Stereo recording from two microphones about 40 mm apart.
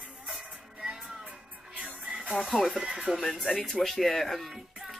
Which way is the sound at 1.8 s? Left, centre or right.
Right.